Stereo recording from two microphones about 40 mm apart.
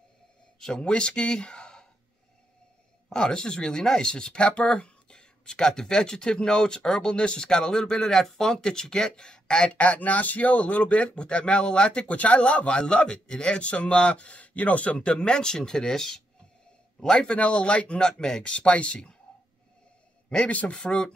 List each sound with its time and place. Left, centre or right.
0.6 s speech: centre
3.1 s speech: centre
9.8 s a man's voice: left
15.0 s speech: left
17.0 s speech: left
18.5 s speech: left
20.4 s a man's voice: left
20.7 s speech: left